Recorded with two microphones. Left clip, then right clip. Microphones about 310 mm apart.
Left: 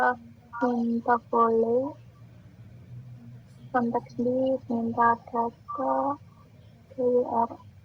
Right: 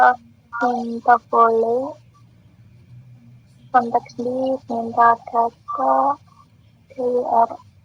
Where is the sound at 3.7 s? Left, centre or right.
Right.